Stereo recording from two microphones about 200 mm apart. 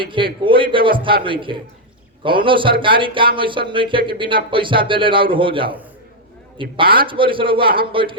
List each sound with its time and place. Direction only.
0.0 s speech: 25° right (ahead or behind)